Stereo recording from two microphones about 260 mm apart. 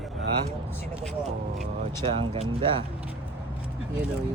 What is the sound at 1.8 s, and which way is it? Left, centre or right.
Speech, right.